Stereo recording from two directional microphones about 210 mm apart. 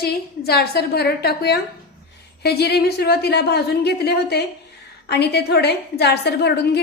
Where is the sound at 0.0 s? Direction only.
50° left (ahead or behind).